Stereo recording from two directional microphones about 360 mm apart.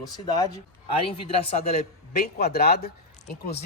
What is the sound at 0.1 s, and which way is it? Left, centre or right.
A man's voice, centre.